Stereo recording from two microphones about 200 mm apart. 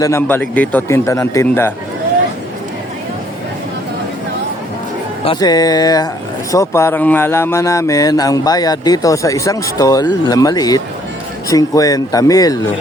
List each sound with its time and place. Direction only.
0.0 s speech: 10° left (ahead or behind)
5.2 s speech: 20° left (ahead or behind)